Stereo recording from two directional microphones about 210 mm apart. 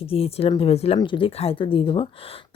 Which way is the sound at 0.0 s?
25° left (ahead or behind).